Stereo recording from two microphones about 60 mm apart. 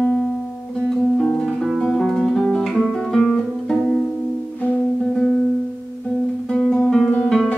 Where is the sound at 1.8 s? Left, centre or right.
Centre.